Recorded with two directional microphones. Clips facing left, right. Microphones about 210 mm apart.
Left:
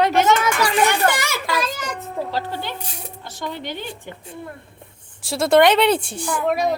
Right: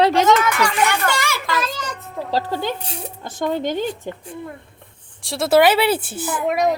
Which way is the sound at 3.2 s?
50° right (ahead or behind).